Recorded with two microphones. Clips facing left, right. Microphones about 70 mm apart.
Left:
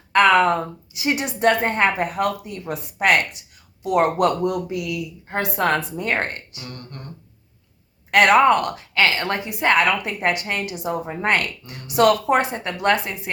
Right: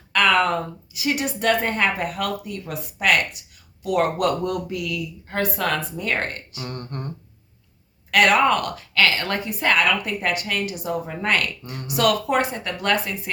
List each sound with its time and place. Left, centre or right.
0.1 s a woman's voice: left
4.4 s a woman's voice: centre
5.5 s speech: left
6.6 s a sound: right
8.1 s a woman's voice: left
11.6 s speech: right
11.9 s a woman's voice: left